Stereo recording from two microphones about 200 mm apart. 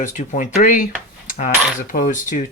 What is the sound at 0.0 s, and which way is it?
Speech, 40° left (ahead or behind).